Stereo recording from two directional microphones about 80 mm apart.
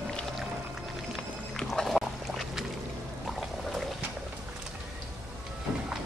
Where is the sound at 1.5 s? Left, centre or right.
Centre.